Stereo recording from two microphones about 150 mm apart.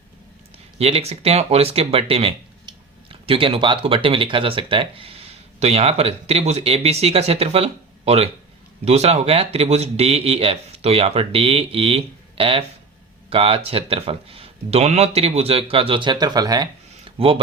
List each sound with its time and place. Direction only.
0.8 s speech: 45° right (ahead or behind); by 16.6 s 25° right (ahead or behind)
17.2 s speech: 40° right (ahead or behind)